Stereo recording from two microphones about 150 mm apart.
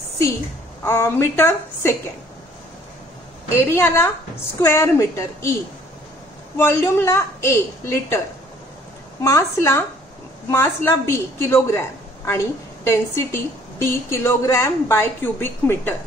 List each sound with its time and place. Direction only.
0.8 s a woman's voice: 15° left (ahead or behind)
3.7 s a woman's voice: 15° left (ahead or behind)
9.2 s a woman's voice: 20° left (ahead or behind)